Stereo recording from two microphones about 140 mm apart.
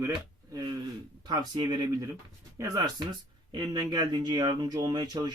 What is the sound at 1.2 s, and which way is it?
Speech, 30° right (ahead or behind).